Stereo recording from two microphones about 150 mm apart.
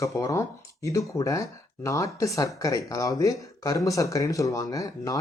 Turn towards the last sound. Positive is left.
turn(degrees=25)  # may be behind; listen again after turning